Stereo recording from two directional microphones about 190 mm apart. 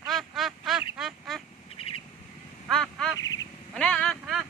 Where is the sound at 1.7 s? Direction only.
30° left (ahead or behind).